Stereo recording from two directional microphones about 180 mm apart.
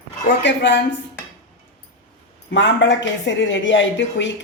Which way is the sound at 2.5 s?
90° left.